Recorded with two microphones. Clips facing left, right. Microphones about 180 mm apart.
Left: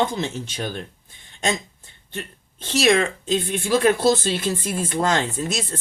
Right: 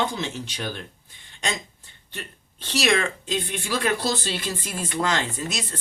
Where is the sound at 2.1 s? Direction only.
45° left (ahead or behind).